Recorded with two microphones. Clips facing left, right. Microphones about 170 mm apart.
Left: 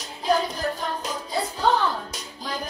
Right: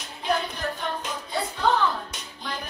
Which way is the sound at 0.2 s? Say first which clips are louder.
Left 4 dB; 35° left (ahead or behind).